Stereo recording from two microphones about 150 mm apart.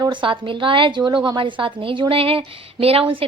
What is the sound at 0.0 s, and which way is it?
A woman's voice, 35° right (ahead or behind).